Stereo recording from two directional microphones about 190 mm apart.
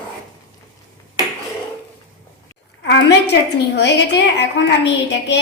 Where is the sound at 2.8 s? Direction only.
65° left (ahead or behind).